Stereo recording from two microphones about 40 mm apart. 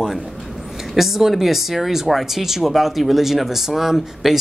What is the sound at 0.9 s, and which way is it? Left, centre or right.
Speech, centre.